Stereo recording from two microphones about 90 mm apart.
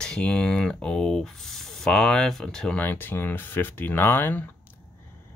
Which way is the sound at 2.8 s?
20° left (ahead or behind).